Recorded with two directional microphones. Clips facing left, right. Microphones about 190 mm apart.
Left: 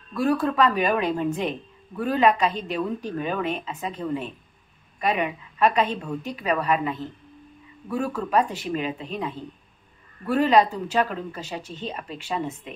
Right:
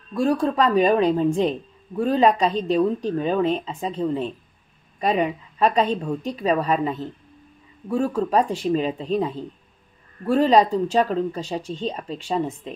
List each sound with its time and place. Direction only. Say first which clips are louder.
0.1 s speech: right 2 dB; 30° right (ahead or behind)